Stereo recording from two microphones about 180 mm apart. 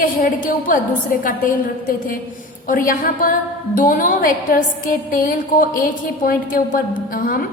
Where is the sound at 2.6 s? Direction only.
50° left (ahead or behind).